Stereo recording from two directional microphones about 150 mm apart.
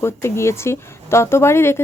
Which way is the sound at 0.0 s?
20° left (ahead or behind).